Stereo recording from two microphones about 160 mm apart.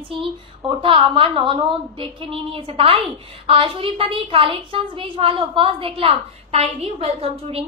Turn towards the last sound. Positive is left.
turn(degrees=-35)  # may be behind; listen again after turning